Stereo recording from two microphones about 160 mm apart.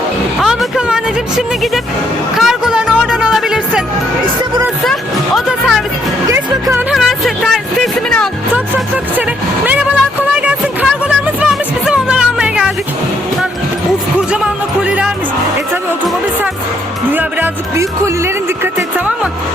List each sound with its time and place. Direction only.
0.4 s music: 5° right (ahead or behind)
6.2 s music: 20° right (ahead or behind)
6.9 s music: centre (ahead or behind)
10.3 s music: 10° right (ahead or behind)
14.3 s music: 5° right (ahead or behind)
17.1 s music: 10° right (ahead or behind)
18.8 s music: 5° right (ahead or behind)